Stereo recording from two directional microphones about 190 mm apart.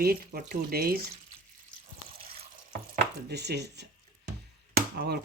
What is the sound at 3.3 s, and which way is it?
Speech, 60° right (ahead or behind).